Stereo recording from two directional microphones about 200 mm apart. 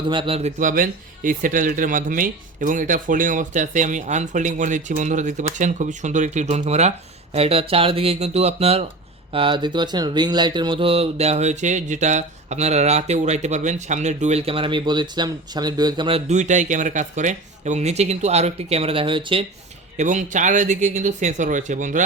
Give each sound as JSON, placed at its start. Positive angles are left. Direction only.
{"t": 0.1, "sound": "speech", "side_deg": -25}
{"t": 20.0, "sound": "speech", "side_deg": -40}